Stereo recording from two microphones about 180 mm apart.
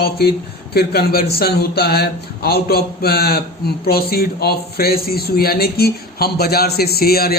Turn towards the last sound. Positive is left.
turn(degrees=60)  # may be behind; listen again after turning